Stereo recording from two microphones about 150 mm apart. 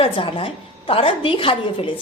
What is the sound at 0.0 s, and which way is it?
A woman's voice, 35° left (ahead or behind).